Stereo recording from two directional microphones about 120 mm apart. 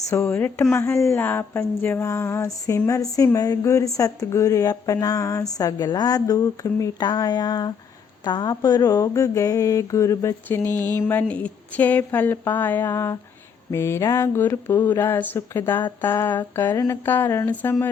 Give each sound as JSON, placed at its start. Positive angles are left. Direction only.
{"t": 0.1, "sound": "speech", "side_deg": 20}